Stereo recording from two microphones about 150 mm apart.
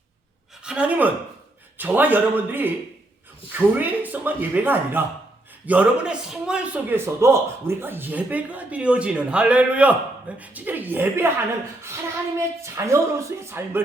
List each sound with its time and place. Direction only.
0.6 s a man's voice: 5° right (ahead or behind)
12.6 s speech: 20° right (ahead or behind)